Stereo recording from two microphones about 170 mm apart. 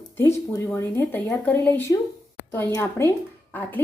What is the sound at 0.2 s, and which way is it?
A woman's voice, 15° left (ahead or behind).